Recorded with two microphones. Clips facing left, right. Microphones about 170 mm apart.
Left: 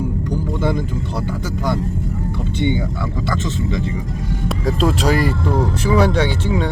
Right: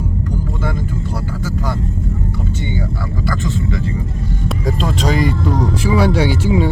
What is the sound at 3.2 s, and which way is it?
Speech, 20° left (ahead or behind).